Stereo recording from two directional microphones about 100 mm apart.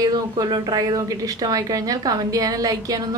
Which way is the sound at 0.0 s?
40° right (ahead or behind).